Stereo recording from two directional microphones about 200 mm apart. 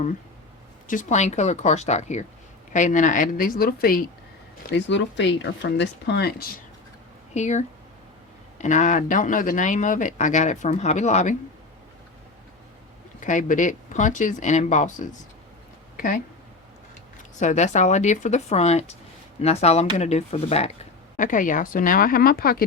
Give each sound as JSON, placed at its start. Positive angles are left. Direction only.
{"t": 0.9, "sound": "speech", "side_deg": 40}
{"t": 4.7, "sound": "speech", "side_deg": 65}
{"t": 7.3, "sound": "speech", "side_deg": 35}
{"t": 13.1, "sound": "speech", "side_deg": 40}
{"t": 17.4, "sound": "speech", "side_deg": 35}
{"t": 21.2, "sound": "speech", "side_deg": 40}